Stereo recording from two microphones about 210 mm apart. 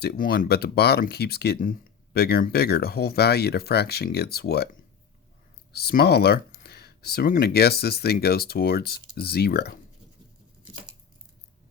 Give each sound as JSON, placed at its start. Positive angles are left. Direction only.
{"t": 0.0, "sound": "speech", "side_deg": 45}